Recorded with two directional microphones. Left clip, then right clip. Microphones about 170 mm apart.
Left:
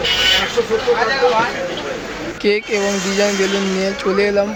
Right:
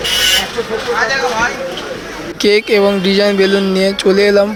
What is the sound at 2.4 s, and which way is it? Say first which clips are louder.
Speech: right 7 dB; 35° right (ahead or behind).